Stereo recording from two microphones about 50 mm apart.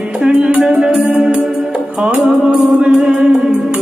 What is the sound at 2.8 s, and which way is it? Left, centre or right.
Music, centre.